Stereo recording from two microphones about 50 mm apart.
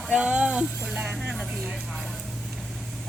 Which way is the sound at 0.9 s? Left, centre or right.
Centre.